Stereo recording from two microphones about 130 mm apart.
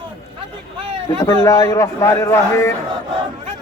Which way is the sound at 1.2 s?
25° left (ahead or behind).